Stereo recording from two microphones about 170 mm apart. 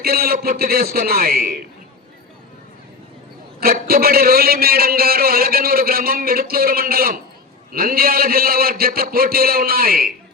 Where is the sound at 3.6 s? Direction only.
60° right (ahead or behind).